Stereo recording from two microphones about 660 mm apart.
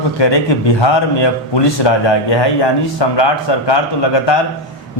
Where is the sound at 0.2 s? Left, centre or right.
Left.